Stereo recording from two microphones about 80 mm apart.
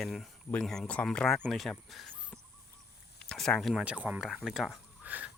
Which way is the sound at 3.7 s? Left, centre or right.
Centre.